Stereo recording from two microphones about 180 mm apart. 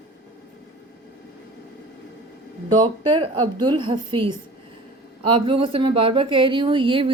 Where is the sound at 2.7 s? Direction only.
25° right (ahead or behind).